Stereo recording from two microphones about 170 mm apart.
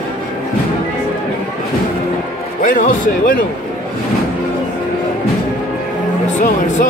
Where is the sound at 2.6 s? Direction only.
50° left (ahead or behind).